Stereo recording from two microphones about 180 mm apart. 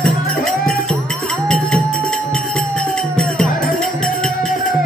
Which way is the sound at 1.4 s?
5° left (ahead or behind).